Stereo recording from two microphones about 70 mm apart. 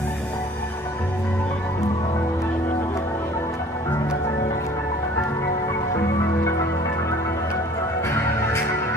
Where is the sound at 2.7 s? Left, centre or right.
Left.